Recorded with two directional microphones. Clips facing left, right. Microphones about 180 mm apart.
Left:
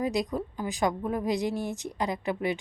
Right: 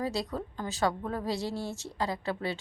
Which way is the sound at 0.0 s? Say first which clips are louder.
Left 4 dB; 15° left (ahead or behind).